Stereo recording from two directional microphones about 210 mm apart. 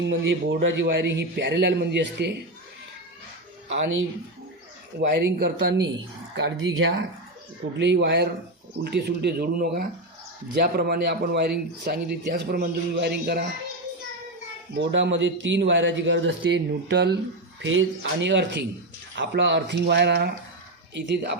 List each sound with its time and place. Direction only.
0.0 s a man's voice: 60° right (ahead or behind)
4.9 s a man's voice: 50° right (ahead or behind)
14.7 s a man's voice: 55° right (ahead or behind)